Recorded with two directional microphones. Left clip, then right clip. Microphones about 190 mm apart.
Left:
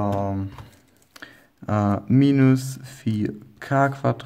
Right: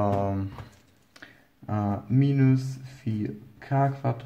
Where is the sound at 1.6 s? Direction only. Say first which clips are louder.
Left 7 dB; 45° left (ahead or behind).